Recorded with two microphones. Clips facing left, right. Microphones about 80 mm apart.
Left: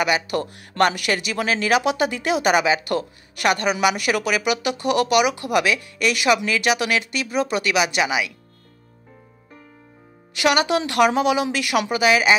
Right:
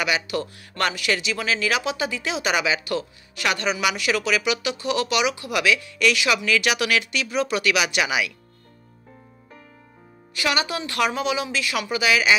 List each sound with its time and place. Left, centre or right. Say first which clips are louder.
0.0 s speech: left 3 dB; left
10.4 s speech: left 6 dB; left
11.0 s speech: left 5 dB; left
11.9 s speech: left 2 dB; left